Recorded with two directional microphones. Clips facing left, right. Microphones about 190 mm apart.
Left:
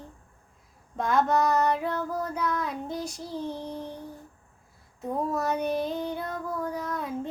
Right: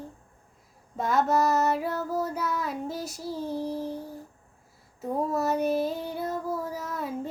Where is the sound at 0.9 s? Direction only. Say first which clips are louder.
Even; 5° right (ahead or behind).